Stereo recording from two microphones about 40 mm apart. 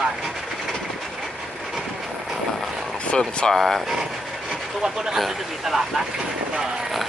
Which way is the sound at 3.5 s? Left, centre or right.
Centre.